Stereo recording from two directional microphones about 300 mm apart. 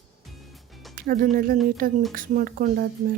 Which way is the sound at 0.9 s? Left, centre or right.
Right.